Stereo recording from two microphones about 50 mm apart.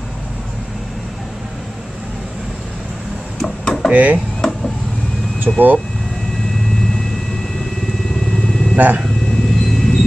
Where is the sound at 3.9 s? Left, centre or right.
Right.